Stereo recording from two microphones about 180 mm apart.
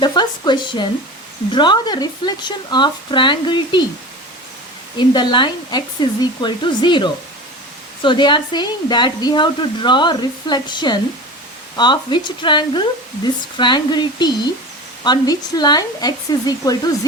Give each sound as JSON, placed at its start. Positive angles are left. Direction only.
{"t": 0.0, "sound": "a woman's voice", "side_deg": 25}
{"t": 4.9, "sound": "a woman's voice", "side_deg": 25}